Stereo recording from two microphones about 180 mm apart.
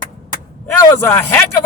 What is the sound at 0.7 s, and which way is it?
Speech, 15° left (ahead or behind).